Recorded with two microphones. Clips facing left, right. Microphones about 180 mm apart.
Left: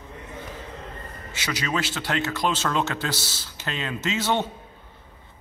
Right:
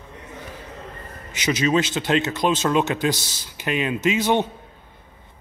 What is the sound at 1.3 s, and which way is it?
A man's voice, 20° right (ahead or behind).